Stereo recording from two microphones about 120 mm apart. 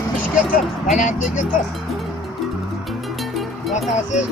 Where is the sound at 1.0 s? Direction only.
90° left.